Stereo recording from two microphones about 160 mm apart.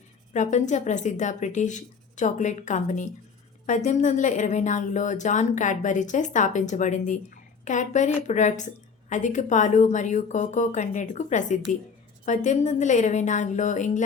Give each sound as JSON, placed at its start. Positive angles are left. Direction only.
{"t": 0.3, "sound": "a woman's voice", "side_deg": 50}